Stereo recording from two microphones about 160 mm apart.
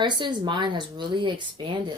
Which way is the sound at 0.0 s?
30° right (ahead or behind).